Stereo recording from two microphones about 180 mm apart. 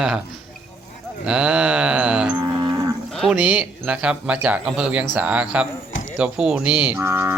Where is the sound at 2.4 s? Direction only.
20° right (ahead or behind).